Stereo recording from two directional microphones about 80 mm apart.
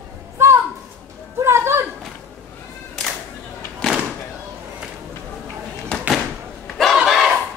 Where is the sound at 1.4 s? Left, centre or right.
Right.